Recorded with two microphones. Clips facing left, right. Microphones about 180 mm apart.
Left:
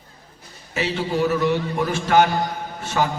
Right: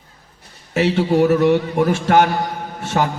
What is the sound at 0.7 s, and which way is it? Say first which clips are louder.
A man's voice: right 7 dB; 60° right (ahead or behind).